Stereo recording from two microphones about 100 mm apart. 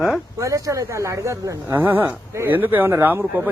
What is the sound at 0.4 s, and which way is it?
Speech, 35° right (ahead or behind).